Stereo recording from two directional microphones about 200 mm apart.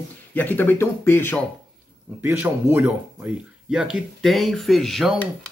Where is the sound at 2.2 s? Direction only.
10° right (ahead or behind).